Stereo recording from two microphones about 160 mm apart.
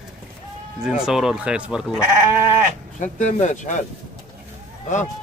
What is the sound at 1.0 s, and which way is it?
Speech, 5° right (ahead or behind).